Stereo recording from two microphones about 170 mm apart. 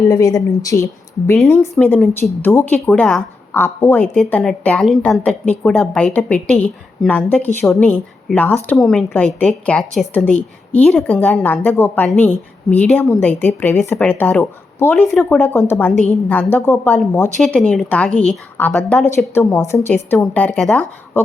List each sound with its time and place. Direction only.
0.0 s speech: 20° left (ahead or behind)
1.5 s speech: 5° left (ahead or behind)